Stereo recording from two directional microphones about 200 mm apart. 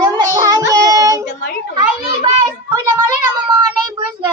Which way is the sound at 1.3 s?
40° left (ahead or behind).